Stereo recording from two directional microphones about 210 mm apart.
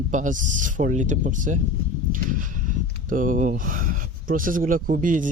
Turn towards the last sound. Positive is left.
turn(degrees=-40)  # may be behind; listen again after turning